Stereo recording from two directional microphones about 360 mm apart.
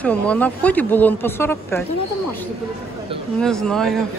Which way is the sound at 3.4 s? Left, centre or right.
Centre.